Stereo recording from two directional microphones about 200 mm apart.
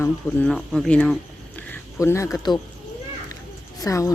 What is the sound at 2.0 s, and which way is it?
Speech, 15° left (ahead or behind).